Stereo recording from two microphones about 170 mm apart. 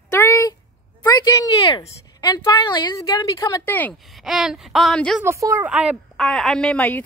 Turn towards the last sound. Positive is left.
turn(degrees=10)  # may be behind; listen again after turning